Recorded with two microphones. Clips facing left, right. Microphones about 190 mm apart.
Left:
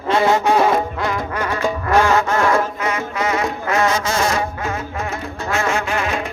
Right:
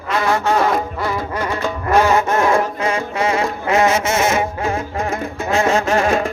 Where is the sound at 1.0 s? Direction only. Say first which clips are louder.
Right 1 dB; 10° right (ahead or behind).